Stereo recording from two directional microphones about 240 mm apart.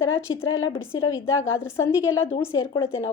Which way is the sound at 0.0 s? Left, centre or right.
Left.